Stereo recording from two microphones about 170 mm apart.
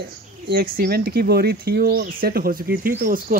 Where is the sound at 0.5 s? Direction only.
65° right (ahead or behind).